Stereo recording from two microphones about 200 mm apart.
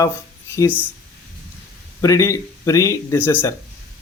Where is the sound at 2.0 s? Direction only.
15° left (ahead or behind).